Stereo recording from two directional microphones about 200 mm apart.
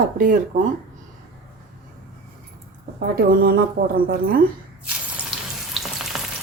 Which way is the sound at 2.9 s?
45° right (ahead or behind).